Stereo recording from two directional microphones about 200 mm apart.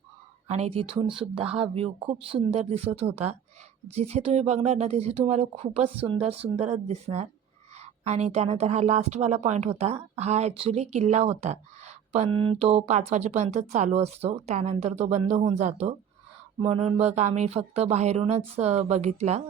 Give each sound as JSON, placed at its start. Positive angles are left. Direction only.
{"t": 0.4, "sound": "a woman's voice", "side_deg": -30}